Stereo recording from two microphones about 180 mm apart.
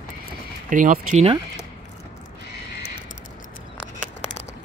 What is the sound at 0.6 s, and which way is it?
Speech, 45° right (ahead or behind).